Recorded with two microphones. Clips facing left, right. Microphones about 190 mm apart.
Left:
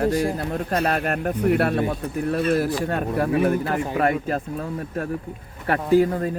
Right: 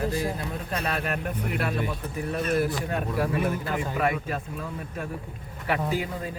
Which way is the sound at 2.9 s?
65° left (ahead or behind).